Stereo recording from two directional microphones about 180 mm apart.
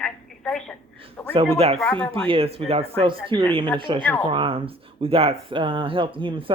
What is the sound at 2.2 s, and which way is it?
Speech, 30° right (ahead or behind).